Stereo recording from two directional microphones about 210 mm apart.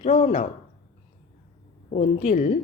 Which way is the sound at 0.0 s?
35° left (ahead or behind).